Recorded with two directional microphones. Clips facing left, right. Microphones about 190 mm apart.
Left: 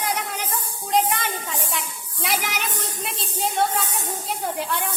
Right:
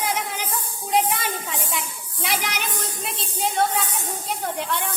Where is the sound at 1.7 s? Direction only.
Centre (ahead or behind).